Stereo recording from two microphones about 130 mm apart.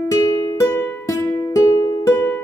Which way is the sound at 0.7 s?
15° left (ahead or behind).